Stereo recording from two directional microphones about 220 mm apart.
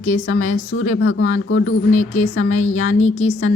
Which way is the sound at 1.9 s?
30° left (ahead or behind).